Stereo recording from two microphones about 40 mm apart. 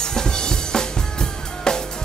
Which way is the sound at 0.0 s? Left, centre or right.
Centre.